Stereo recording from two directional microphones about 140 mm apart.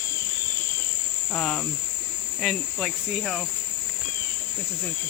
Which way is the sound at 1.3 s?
10° left (ahead or behind).